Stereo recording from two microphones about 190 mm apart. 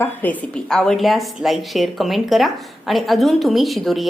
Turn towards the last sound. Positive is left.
turn(degrees=0)  # may be behind; listen again after turning